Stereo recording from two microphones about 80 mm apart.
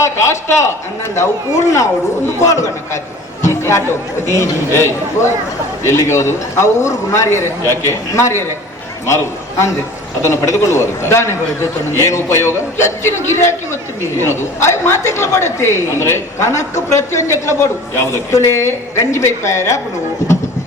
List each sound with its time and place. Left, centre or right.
0.0 s a woman's voice: left
3.4 s chatter: left
4.3 s a woman's voice: left